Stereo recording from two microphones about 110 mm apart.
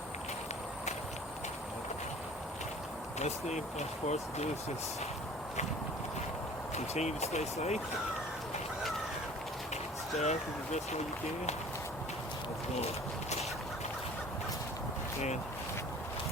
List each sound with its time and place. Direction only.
3.2 s speech: 90° left
6.7 s speech: 80° left
10.2 s speech: 85° left